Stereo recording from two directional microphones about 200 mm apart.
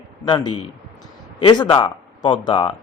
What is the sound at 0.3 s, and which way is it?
A man's voice, 20° left (ahead or behind).